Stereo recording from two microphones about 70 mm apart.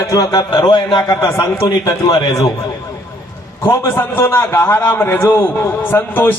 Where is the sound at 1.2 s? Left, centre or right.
Left.